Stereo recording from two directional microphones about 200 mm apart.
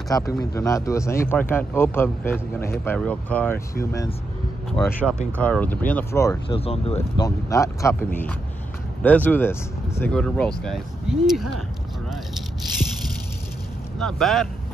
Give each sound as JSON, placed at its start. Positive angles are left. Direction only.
{"t": 0.1, "sound": "speech", "side_deg": 15}
{"t": 4.7, "sound": "speech", "side_deg": 5}
{"t": 6.5, "sound": "speech", "side_deg": 30}
{"t": 7.2, "sound": "speech", "side_deg": 15}
{"t": 12.6, "sound": "a sound", "side_deg": 0}
{"t": 13.9, "sound": "speech", "side_deg": 0}